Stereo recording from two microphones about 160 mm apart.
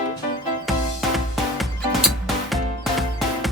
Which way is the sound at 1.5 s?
Centre (ahead or behind).